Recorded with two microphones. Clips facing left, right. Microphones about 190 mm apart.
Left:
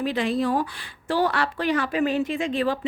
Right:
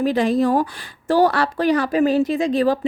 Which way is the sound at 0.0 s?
40° right (ahead or behind).